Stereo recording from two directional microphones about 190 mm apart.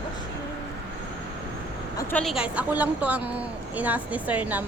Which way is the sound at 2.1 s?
Centre (ahead or behind).